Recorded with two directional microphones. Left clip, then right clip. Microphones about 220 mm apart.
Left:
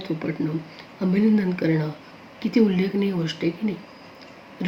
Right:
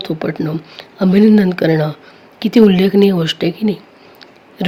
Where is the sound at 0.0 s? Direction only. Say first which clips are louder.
Right 8 dB; 45° right (ahead or behind).